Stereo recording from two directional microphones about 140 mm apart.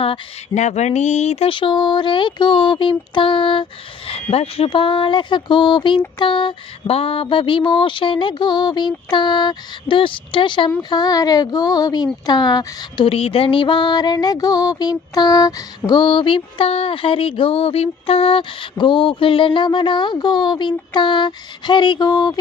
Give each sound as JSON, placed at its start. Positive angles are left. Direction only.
{"t": 0.6, "sound": "speech", "side_deg": 55}